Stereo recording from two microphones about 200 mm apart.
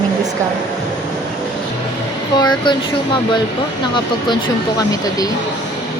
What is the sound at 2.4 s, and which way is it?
Speech, 20° left (ahead or behind).